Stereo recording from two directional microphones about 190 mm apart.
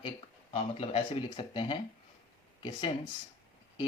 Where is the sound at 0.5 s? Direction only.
30° left (ahead or behind).